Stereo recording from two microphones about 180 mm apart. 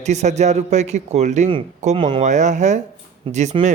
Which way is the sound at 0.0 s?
40° right (ahead or behind).